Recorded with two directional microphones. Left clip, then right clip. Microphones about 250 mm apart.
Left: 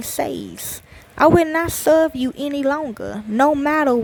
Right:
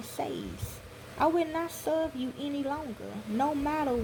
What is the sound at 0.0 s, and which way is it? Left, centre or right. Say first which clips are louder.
Speech: left 11 dB; left.